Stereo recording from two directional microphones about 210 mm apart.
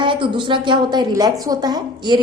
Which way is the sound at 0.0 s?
25° right (ahead or behind).